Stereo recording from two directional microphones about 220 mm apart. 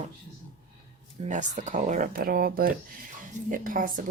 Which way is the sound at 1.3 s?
35° right (ahead or behind).